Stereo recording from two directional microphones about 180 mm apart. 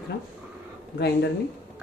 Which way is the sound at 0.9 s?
65° left (ahead or behind).